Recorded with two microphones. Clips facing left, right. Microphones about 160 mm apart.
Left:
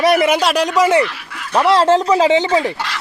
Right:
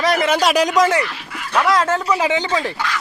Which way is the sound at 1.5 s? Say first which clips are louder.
Left 5 dB; 30° left (ahead or behind).